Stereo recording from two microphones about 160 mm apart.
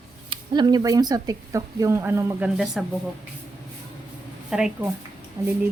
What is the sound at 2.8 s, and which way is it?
Speech, centre (ahead or behind).